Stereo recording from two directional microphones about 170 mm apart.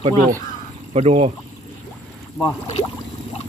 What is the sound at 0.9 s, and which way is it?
Speech, 35° right (ahead or behind).